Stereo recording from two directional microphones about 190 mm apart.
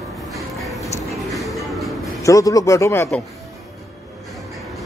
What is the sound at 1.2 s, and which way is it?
Music, centre (ahead or behind).